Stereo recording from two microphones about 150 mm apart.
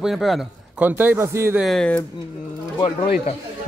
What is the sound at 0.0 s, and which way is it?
A man's voice, centre (ahead or behind).